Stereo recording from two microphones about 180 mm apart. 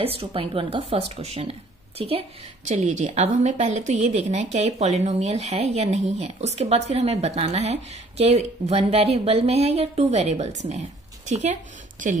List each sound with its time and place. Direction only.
0.0 s speech: 30° right (ahead or behind)